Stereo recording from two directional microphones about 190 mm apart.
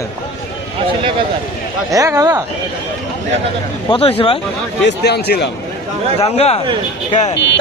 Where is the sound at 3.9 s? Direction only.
30° left (ahead or behind).